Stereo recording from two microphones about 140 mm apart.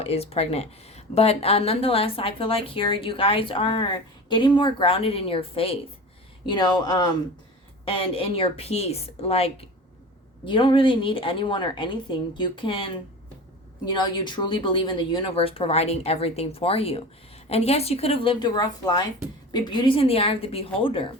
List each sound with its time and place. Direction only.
0.0 s speech: 45° left (ahead or behind)
6.5 s speech: 30° left (ahead or behind)
7.9 s a woman's voice: 40° left (ahead or behind)